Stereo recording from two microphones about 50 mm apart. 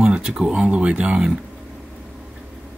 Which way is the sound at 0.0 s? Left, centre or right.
Centre.